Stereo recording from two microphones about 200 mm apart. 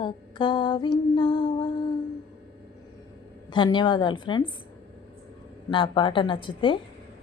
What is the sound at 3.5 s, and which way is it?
Child singing, 25° left (ahead or behind).